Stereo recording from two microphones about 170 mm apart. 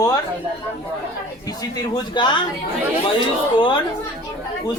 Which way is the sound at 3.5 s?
30° left (ahead or behind).